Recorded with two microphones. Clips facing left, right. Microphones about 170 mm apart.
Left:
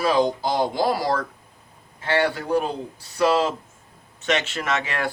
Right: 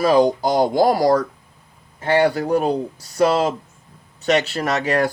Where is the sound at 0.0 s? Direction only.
45° right (ahead or behind).